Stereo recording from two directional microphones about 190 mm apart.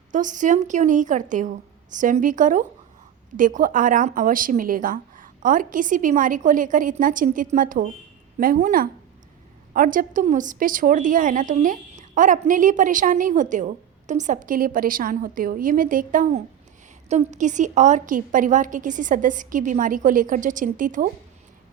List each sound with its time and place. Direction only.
0.1 s a woman's voice: 40° right (ahead or behind)